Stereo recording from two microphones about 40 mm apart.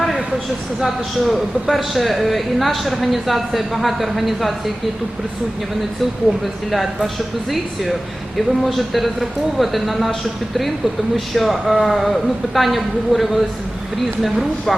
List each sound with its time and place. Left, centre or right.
0.8 s a man's voice: centre
6.4 s a man's voice: centre
11.3 s a man's voice: centre